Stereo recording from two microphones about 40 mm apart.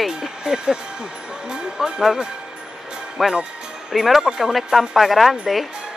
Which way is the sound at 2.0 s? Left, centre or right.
Centre.